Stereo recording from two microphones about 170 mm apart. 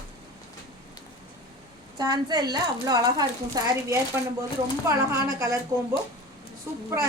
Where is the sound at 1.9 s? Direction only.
25° right (ahead or behind).